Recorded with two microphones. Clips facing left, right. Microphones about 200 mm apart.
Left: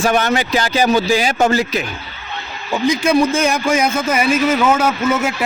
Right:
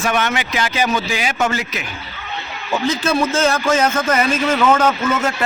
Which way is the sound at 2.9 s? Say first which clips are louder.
Left 5 dB; 15° left (ahead or behind).